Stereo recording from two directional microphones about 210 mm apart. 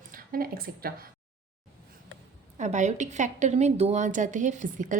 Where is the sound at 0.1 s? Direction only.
45° right (ahead or behind).